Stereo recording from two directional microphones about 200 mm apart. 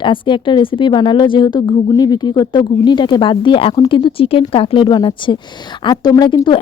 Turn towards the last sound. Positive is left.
turn(degrees=25)  # may be behind; listen again after turning